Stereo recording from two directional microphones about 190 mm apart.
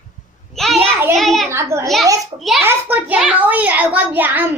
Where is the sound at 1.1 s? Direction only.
Centre (ahead or behind).